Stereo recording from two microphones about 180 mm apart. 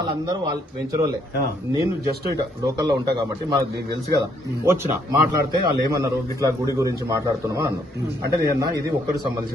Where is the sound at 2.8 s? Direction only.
25° right (ahead or behind).